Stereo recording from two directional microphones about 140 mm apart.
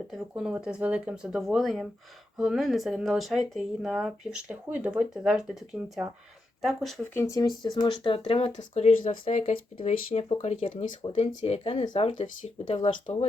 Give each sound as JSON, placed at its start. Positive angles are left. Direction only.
{"t": 0.1, "sound": "speech", "side_deg": -5}
{"t": 7.1, "sound": "speech", "side_deg": 20}
{"t": 8.5, "sound": "speech", "side_deg": 50}
{"t": 9.8, "sound": "speech", "side_deg": 55}
{"t": 11.0, "sound": "speech", "side_deg": 40}